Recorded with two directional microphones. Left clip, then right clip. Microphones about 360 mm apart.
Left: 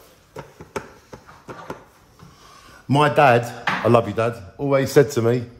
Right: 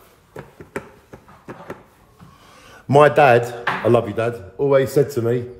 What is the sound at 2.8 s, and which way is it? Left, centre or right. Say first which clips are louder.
A man's voice: right 3 dB; centre.